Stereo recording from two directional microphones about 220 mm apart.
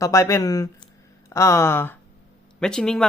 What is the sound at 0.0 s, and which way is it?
Speech, 15° left (ahead or behind).